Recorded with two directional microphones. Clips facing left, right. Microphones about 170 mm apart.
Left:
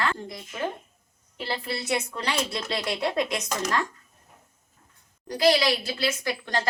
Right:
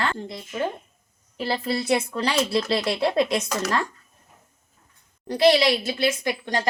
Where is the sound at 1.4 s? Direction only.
40° right (ahead or behind).